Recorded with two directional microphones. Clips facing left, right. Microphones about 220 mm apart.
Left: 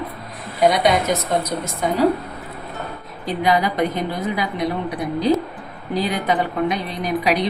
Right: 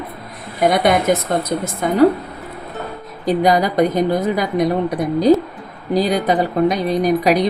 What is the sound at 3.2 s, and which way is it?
A woman's voice, 40° right (ahead or behind).